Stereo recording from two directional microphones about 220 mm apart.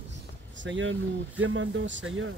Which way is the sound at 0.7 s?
60° right (ahead or behind).